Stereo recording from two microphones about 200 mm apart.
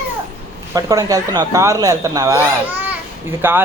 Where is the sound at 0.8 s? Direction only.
20° right (ahead or behind).